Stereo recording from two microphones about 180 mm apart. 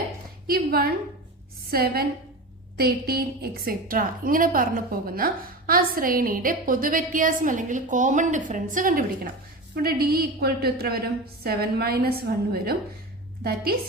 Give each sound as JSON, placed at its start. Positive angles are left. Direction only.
{"t": 0.4, "sound": "a woman's voice", "side_deg": -55}
{"t": 13.4, "sound": "a woman's voice", "side_deg": -60}